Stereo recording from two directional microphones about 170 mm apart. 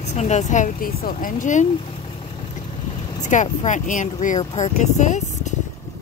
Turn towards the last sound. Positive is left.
turn(degrees=45)  # may be behind; listen again after turning